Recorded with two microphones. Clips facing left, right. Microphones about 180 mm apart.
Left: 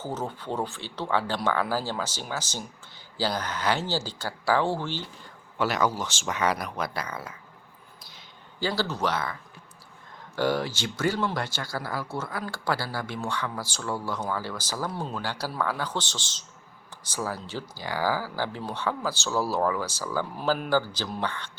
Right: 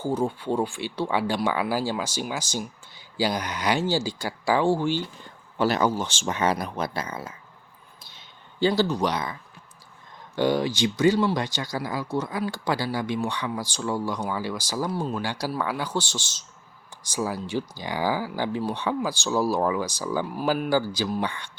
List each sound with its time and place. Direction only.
0.0 s speech: 10° right (ahead or behind)
5.5 s speech: 30° right (ahead or behind)
8.6 s speech: 20° right (ahead or behind)
10.3 s speech: 20° right (ahead or behind)